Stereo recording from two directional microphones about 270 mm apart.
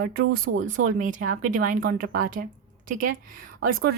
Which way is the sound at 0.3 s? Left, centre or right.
Right.